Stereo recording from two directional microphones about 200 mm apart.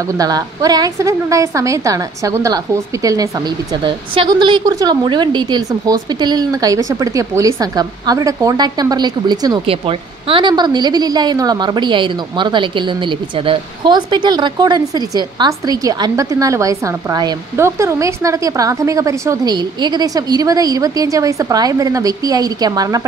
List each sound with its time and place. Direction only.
0.0 s a woman's voice: 20° right (ahead or behind)